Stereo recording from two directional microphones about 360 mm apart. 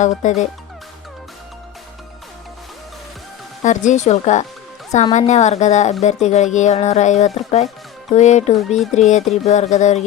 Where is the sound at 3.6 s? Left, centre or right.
Centre.